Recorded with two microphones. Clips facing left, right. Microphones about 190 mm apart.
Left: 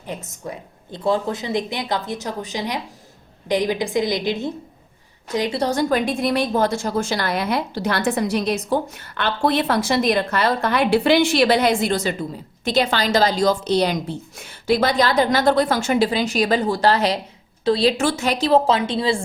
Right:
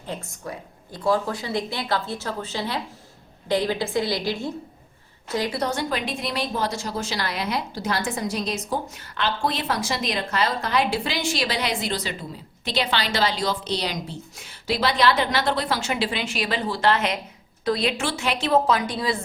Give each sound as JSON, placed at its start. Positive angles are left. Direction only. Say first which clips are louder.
{"t": 0.1, "sound": "a woman's voice", "louder": "left 2 dB", "side_deg": 20}
{"t": 5.9, "sound": "a woman's voice", "louder": "left 8 dB", "side_deg": 50}